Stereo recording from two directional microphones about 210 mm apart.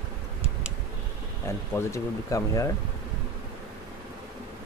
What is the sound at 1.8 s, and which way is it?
Speech, 15° left (ahead or behind).